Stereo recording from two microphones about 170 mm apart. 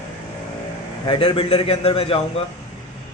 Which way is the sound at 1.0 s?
30° left (ahead or behind).